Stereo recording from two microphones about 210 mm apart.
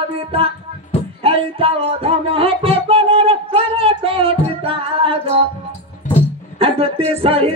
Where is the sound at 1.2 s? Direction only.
25° right (ahead or behind).